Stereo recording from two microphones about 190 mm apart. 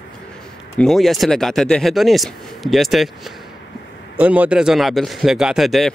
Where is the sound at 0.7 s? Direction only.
Centre (ahead or behind).